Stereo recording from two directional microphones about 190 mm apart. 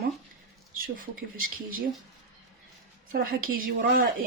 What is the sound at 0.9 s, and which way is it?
Speech, 50° right (ahead or behind).